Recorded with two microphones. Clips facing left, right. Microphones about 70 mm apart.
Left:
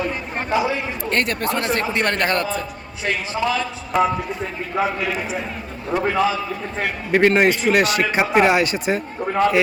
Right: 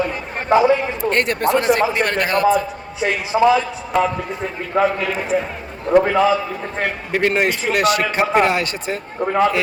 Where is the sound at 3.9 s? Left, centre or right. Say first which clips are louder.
Even; centre.